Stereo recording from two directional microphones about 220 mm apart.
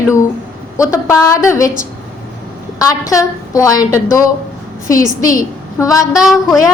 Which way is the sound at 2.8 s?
15° left (ahead or behind).